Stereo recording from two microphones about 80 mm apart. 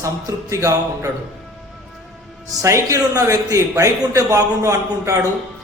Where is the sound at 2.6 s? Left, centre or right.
Right.